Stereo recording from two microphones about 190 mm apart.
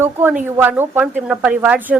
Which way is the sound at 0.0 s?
10° right (ahead or behind).